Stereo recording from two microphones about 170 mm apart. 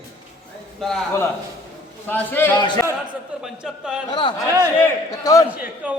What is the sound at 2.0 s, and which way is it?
Speech, 10° left (ahead or behind).